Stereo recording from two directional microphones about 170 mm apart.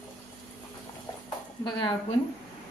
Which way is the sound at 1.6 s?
30° left (ahead or behind).